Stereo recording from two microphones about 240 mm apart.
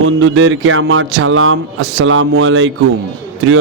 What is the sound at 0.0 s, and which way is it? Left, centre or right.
A man's voice, right.